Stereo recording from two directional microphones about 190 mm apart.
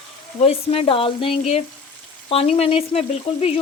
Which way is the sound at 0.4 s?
30° left (ahead or behind).